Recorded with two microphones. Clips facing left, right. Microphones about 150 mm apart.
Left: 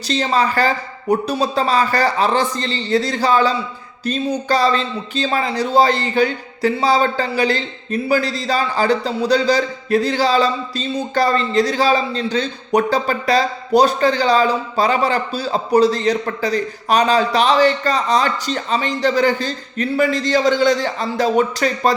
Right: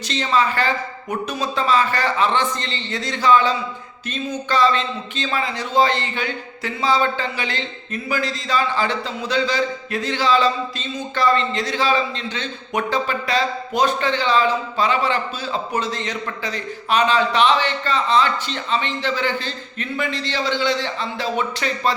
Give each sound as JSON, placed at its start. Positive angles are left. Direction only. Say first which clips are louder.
{"t": 0.1, "sound": "a man's voice", "louder": "left 3 dB", "side_deg": 35}